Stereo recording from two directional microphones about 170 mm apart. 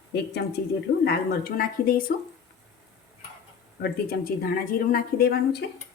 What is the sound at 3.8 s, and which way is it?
A woman's voice, 60° left (ahead or behind).